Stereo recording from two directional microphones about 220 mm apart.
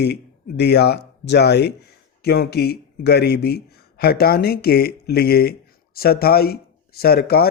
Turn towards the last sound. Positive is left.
turn(degrees=45)  # may be behind; listen again after turning